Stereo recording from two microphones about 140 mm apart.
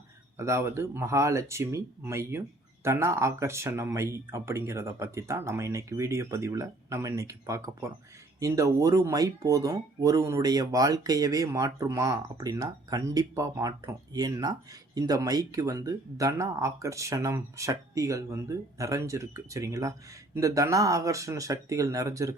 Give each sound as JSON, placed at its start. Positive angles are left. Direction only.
{"t": 0.3, "sound": "speech", "side_deg": -20}